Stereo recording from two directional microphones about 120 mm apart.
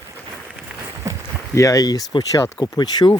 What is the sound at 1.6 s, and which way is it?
Speech, 25° left (ahead or behind).